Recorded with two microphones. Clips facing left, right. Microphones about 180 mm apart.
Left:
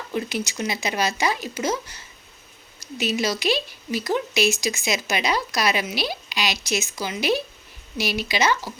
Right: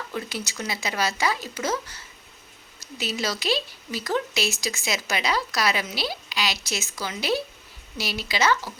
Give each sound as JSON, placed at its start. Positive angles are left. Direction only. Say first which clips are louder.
{"t": 0.1, "sound": "speech", "louder": "left 9 dB", "side_deg": 15}
{"t": 3.0, "sound": "speech", "louder": "left 5 dB", "side_deg": 15}